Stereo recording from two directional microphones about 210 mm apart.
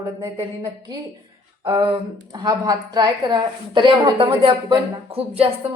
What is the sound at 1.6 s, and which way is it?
A woman's voice, 25° right (ahead or behind).